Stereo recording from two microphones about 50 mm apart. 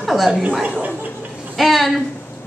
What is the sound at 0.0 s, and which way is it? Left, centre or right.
Chuckle, centre.